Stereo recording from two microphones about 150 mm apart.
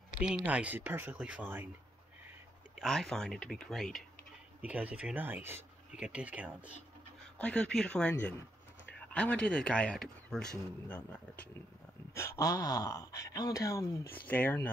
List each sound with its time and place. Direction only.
0.2 s speech: 10° right (ahead or behind)
2.8 s speech: centre (ahead or behind)
4.6 s speech: 10° right (ahead or behind)
7.3 s speech: 5° left (ahead or behind)
14.2 s speech: 10° left (ahead or behind)